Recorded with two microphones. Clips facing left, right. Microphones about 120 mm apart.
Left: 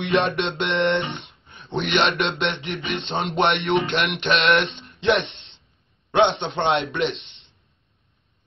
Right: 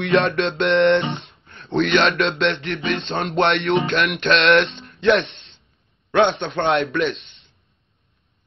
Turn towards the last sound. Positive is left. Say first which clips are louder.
# right 2 dB
turn(degrees=20)  # may be behind; listen again after turning